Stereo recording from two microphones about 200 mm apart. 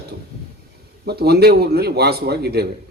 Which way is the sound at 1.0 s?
55° right (ahead or behind).